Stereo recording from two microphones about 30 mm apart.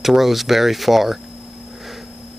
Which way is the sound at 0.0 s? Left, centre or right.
Centre.